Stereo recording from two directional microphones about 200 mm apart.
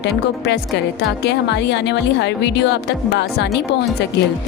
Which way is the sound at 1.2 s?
60° left (ahead or behind).